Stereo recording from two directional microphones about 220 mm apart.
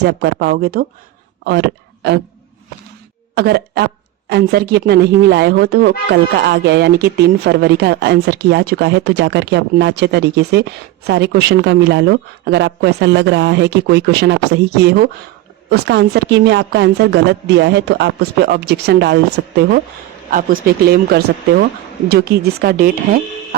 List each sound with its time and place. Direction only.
0.0 s speech: 50° right (ahead or behind)
3.3 s speech: 45° right (ahead or behind)
20.3 s speech: 40° right (ahead or behind)